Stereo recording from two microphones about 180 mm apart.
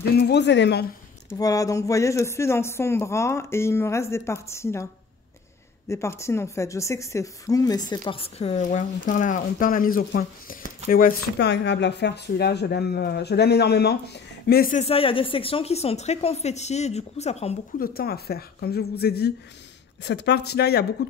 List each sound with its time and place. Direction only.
0.2 s a woman's voice: 70° left (ahead or behind)
1.4 s speech: 20° left (ahead or behind)
5.9 s speech: 15° left (ahead or behind)
8.0 s speech: 35° left (ahead or behind); by 14.8 s 55° left (ahead or behind)
14.8 s a woman's voice: 30° left (ahead or behind)
17.7 s speech: 55° left (ahead or behind)
20.0 s speech: 70° left (ahead or behind)